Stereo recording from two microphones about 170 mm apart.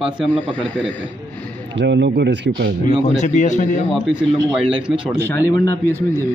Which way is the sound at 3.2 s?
45° left (ahead or behind).